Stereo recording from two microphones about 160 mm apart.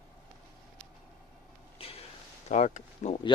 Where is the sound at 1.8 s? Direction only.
35° left (ahead or behind).